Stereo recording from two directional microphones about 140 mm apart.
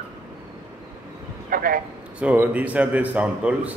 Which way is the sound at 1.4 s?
90° right.